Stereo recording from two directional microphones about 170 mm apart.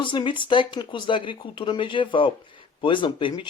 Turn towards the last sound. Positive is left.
turn(degrees=30)  # may be behind; listen again after turning